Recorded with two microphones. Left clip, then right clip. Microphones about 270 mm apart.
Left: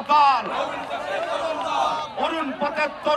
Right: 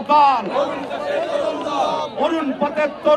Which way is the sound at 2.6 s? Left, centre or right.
Centre.